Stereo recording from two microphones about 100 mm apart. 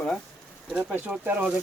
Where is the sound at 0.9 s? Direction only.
15° right (ahead or behind).